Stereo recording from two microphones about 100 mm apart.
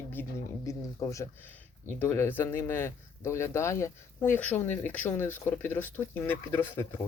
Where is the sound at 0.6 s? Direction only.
30° left (ahead or behind).